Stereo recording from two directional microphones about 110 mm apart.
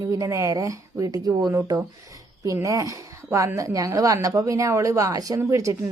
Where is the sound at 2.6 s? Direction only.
30° right (ahead or behind).